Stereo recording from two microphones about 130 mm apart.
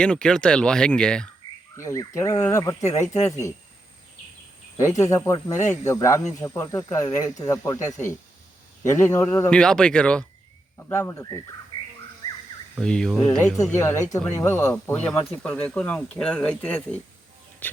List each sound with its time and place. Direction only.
0.0 s speech: 10° left (ahead or behind)
1.7 s speech: 20° left (ahead or behind)
4.8 s speech: 25° left (ahead or behind)
9.5 s speech: 5° left (ahead or behind)
12.8 s speech: 5° left (ahead or behind)
13.7 s speech: 20° left (ahead or behind)
17.6 s music: 10° left (ahead or behind)